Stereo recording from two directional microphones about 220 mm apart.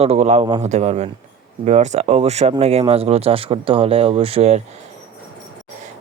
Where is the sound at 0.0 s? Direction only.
30° right (ahead or behind).